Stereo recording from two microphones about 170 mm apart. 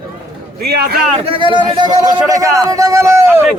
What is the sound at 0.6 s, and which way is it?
Speech, 70° right (ahead or behind).